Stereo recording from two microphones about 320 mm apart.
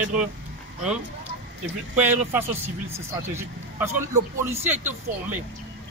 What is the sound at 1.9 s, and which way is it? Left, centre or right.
Speech, centre.